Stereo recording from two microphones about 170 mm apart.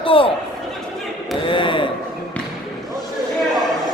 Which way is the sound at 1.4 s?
30° left (ahead or behind).